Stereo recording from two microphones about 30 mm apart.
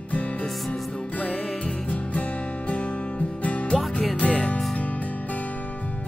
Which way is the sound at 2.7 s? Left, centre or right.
Left.